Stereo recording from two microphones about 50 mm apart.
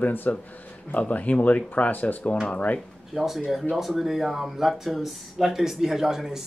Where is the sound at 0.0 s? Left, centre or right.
Left.